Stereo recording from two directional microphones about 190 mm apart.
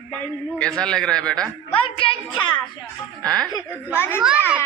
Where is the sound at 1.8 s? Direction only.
30° left (ahead or behind).